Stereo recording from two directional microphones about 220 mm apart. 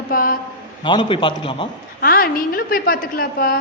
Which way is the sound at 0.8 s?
20° left (ahead or behind).